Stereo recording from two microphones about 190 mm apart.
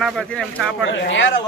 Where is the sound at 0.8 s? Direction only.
75° left (ahead or behind).